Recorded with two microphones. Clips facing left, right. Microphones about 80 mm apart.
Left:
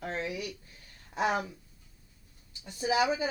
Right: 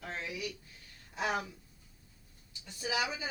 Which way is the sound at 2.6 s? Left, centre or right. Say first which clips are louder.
Left 8 dB; left.